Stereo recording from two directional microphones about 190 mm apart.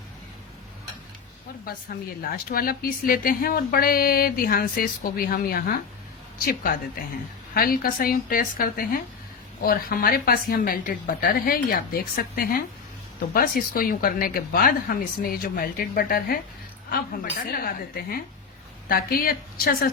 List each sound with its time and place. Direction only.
2.2 s speech: 50° left (ahead or behind)
17.4 s speech: 50° left (ahead or behind)